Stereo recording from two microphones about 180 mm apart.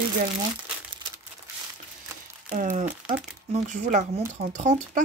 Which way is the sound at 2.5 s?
45° right (ahead or behind).